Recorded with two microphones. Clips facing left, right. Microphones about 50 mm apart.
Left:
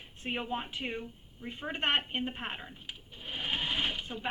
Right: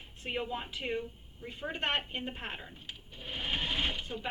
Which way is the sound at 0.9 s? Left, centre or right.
Centre.